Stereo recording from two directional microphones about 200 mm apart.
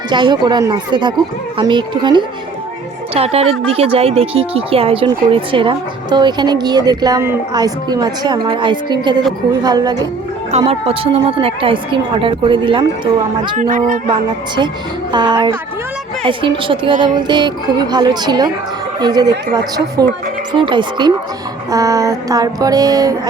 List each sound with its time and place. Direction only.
0.1 s speech: 25° right (ahead or behind)
13.6 s speech: 40° right (ahead or behind)
15.1 s speech: 20° right (ahead or behind)
16.9 s speech: 40° right (ahead or behind)
17.2 s speech: 20° right (ahead or behind)
21.7 s a sound: 15° right (ahead or behind)